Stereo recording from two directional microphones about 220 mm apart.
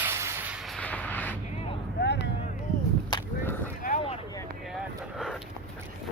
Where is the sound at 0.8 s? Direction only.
5° left (ahead or behind).